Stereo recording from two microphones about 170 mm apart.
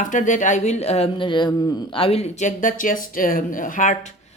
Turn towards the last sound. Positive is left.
turn(degrees=50)  # may be behind; listen again after turning